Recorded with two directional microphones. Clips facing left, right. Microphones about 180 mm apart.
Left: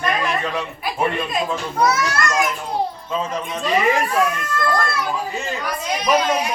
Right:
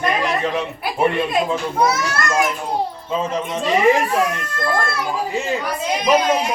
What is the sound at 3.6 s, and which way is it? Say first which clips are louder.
Speech: right 3 dB; 25° right (ahead or behind).